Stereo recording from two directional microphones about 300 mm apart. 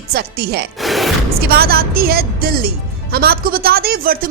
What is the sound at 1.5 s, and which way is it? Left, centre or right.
A woman's voice, right.